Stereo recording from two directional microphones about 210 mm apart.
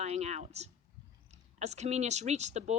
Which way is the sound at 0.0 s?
30° right (ahead or behind).